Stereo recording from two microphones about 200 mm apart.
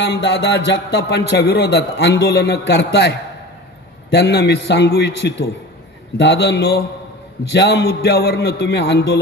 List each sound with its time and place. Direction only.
0.0 s a man's voice: 60° left (ahead or behind)